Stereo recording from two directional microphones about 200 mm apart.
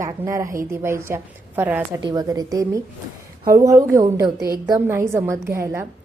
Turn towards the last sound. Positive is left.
turn(degrees=-10)  # may be behind; listen again after turning